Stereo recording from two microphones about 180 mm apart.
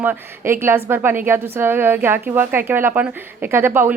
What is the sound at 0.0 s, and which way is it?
Speech, 10° right (ahead or behind).